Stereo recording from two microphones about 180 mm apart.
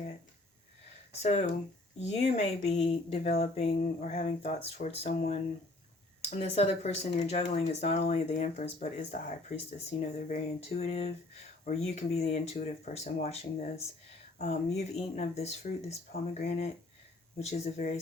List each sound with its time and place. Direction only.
1.1 s speech: 40° left (ahead or behind)